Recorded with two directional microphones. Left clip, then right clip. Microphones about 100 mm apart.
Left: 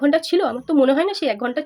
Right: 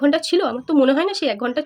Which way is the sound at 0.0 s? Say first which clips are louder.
Even; 15° right (ahead or behind).